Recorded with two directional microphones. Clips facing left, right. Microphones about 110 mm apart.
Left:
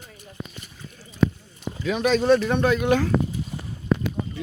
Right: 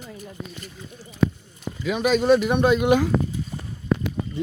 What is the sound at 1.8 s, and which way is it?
Speech, 5° right (ahead or behind).